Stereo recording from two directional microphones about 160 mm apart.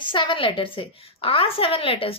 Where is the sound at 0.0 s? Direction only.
30° left (ahead or behind).